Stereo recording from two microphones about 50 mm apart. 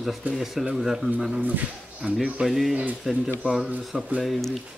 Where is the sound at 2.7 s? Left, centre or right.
Right.